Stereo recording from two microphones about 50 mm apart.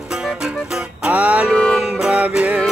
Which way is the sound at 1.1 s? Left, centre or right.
Right.